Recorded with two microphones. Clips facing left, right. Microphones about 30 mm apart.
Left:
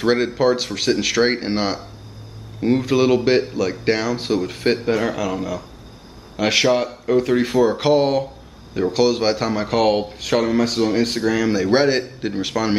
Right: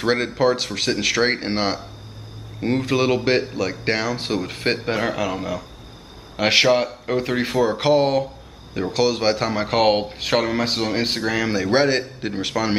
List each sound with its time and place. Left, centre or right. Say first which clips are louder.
0.0 s speech: left 2 dB; centre
7.5 s speech: even; centre
11.6 s speech: even; centre